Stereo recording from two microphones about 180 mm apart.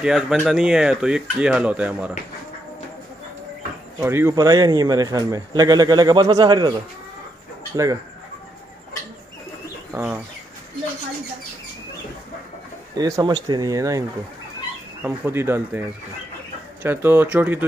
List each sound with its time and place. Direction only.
0.0 s speech: centre (ahead or behind)
4.0 s speech: 15° right (ahead or behind)
7.7 s speech: 20° right (ahead or behind)
9.9 s speech: 15° right (ahead or behind)
12.9 s speech: 20° right (ahead or behind)
15.0 s speech: 15° right (ahead or behind)
16.8 s speech: 10° right (ahead or behind)